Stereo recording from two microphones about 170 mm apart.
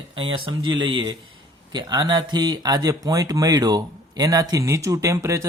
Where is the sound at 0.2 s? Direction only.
30° right (ahead or behind).